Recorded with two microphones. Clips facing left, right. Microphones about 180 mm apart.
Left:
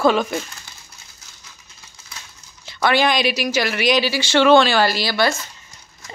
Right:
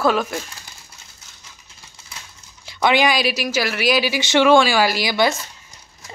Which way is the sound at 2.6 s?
15° right (ahead or behind).